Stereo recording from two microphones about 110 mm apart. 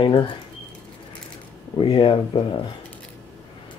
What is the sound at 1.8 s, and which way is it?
Speech, 50° left (ahead or behind).